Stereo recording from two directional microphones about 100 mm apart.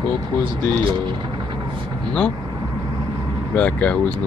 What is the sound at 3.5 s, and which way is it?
Speech, 15° left (ahead or behind).